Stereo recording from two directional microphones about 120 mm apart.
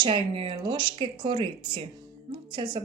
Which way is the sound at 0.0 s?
45° right (ahead or behind).